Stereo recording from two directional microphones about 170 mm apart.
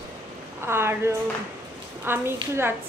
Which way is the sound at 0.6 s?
15° right (ahead or behind).